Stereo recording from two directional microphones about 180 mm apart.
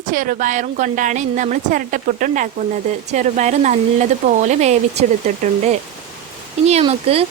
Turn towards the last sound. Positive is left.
turn(degrees=-30)  # may be behind; listen again after turning